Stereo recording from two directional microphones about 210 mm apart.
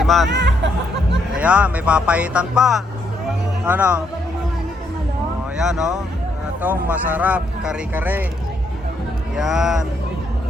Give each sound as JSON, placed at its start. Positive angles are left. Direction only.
{"t": 0.0, "sound": "speech", "side_deg": 0}
{"t": 0.3, "sound": "speech", "side_deg": -55}
{"t": 1.4, "sound": "speech", "side_deg": -5}
{"t": 5.5, "sound": "speech", "side_deg": -5}
{"t": 9.3, "sound": "speech", "side_deg": -5}